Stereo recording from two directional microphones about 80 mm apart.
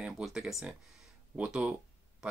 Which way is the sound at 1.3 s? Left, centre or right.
Centre.